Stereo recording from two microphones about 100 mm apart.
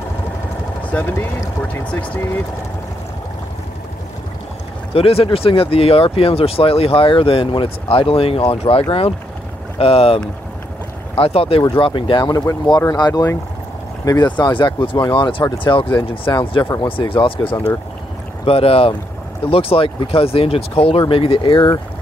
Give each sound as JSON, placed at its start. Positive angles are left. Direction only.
{"t": 0.8, "sound": "speech", "side_deg": 15}
{"t": 4.9, "sound": "speech", "side_deg": 75}
{"t": 11.7, "sound": "speech", "side_deg": 55}
{"t": 14.4, "sound": "speech", "side_deg": 55}
{"t": 18.4, "sound": "speech", "side_deg": 75}